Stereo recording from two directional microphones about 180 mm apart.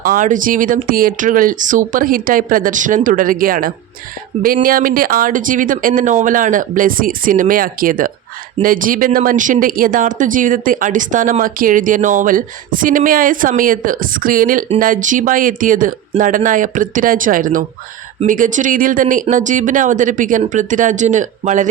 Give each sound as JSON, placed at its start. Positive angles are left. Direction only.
{"t": 0.0, "sound": "speech", "side_deg": -50}